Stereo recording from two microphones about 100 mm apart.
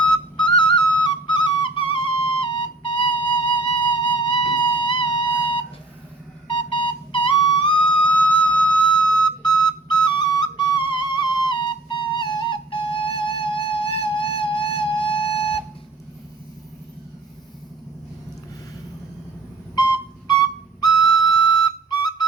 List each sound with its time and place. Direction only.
0.3 s flute: 50° left (ahead or behind)
6.5 s music: 55° left (ahead or behind)
19.7 s whistle: 45° left (ahead or behind)